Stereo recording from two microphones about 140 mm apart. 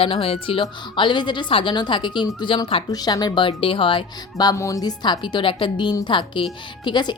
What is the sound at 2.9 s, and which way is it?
A woman's voice, 30° left (ahead or behind).